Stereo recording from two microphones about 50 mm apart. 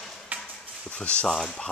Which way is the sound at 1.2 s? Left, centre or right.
Centre.